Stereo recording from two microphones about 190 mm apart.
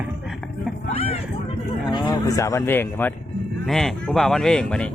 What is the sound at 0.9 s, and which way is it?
Vehicle, 30° left (ahead or behind).